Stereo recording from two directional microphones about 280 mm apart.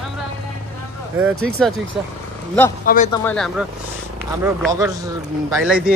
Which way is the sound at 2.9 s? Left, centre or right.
Left.